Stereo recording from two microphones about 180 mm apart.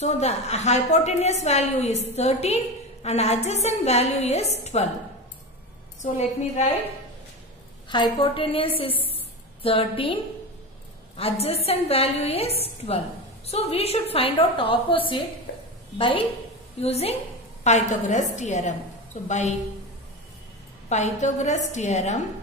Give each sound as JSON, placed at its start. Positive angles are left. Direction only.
{"t": 0.0, "sound": "a woman's voice", "side_deg": 40}
{"t": 6.1, "sound": "a woman's voice", "side_deg": 40}
{"t": 7.9, "sound": "a woman's voice", "side_deg": 25}
{"t": 11.1, "sound": "a woman's voice", "side_deg": 35}
{"t": 16.8, "sound": "a woman's voice", "side_deg": 35}
{"t": 20.9, "sound": "a woman's voice", "side_deg": 40}